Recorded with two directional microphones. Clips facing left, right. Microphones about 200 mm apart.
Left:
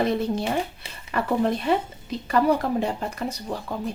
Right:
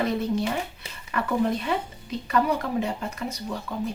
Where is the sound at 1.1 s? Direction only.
35° left (ahead or behind).